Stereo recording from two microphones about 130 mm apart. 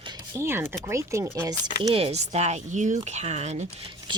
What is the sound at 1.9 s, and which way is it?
Speech, 50° right (ahead or behind).